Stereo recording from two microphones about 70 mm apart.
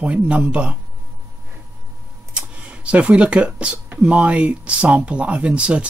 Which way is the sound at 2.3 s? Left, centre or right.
Centre.